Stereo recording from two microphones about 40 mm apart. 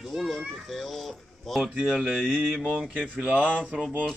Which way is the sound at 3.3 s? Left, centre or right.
Left.